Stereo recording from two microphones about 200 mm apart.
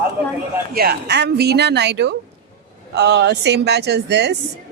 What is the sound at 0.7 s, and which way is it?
A woman's voice, 50° right (ahead or behind).